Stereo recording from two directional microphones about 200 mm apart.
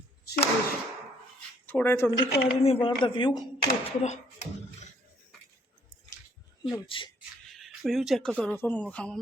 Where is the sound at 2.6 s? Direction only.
30° left (ahead or behind).